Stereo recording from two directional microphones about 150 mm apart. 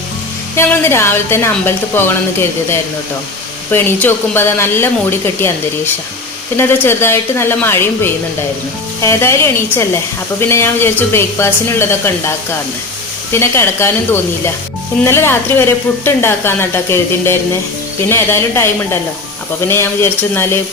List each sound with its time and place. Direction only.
0.5 s a woman's voice: 15° left (ahead or behind)
6.6 s a woman's voice: 15° left (ahead or behind)